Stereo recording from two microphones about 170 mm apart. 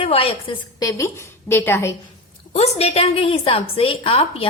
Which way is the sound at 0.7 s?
20° left (ahead or behind).